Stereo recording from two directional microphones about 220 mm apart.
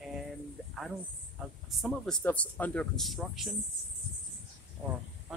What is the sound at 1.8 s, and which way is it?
Speech, centre (ahead or behind).